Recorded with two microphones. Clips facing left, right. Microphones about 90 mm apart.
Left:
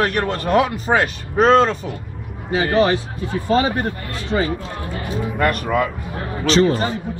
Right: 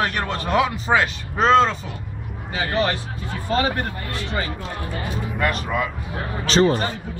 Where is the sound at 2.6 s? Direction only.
30° left (ahead or behind).